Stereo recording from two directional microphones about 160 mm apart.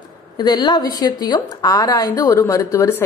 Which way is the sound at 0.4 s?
25° left (ahead or behind).